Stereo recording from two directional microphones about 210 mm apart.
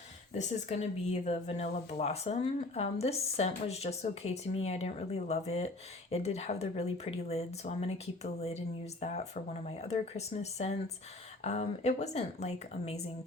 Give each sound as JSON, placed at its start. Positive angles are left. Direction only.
{"t": 0.3, "sound": "speech", "side_deg": 30}